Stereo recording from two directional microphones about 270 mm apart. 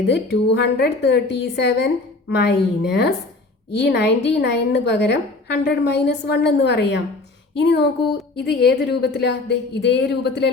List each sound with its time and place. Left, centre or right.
0.1 s a woman's voice: left